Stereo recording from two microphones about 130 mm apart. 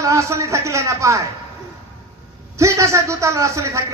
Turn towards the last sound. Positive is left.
turn(degrees=-25)  # may be behind; listen again after turning